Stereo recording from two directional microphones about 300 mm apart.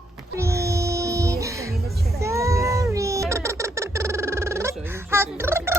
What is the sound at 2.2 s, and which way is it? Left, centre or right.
Cat, centre.